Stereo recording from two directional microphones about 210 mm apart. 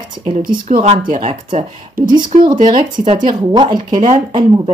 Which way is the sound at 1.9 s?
20° right (ahead or behind).